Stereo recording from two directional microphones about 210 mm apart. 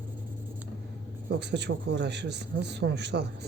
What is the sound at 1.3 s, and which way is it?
A man's voice, 55° right (ahead or behind).